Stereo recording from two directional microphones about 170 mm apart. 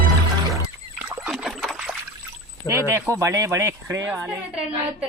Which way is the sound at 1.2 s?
5° right (ahead or behind).